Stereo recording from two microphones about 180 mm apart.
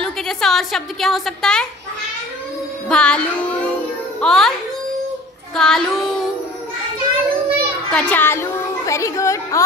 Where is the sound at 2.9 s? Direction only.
5° left (ahead or behind).